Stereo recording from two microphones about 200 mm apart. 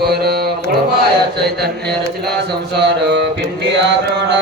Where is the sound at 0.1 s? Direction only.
50° right (ahead or behind).